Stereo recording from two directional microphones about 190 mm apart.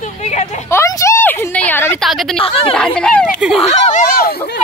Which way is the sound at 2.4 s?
30° left (ahead or behind).